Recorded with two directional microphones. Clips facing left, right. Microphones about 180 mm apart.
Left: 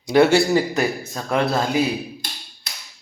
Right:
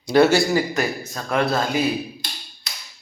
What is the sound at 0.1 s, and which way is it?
Speech, 20° left (ahead or behind).